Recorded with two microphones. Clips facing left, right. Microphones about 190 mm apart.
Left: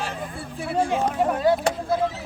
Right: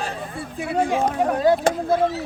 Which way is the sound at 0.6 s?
15° right (ahead or behind).